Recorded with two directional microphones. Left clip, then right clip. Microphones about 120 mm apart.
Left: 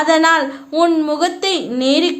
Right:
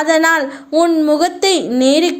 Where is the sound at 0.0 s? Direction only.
40° right (ahead or behind).